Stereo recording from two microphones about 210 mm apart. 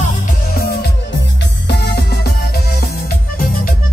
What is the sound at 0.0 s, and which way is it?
Music, 40° left (ahead or behind).